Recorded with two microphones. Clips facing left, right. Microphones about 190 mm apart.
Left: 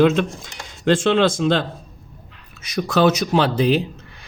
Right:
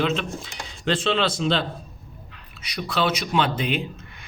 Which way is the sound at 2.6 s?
45° left (ahead or behind).